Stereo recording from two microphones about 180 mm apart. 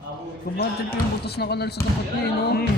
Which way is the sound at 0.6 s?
60° left (ahead or behind).